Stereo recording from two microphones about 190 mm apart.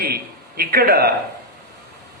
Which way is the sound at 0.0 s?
55° right (ahead or behind).